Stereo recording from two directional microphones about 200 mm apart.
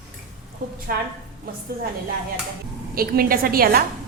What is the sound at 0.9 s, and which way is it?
Speech, 45° right (ahead or behind).